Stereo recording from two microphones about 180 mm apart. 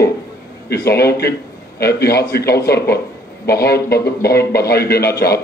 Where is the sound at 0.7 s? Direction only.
65° left (ahead or behind).